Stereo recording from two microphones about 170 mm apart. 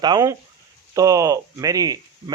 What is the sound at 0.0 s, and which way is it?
A man's voice, 20° right (ahead or behind).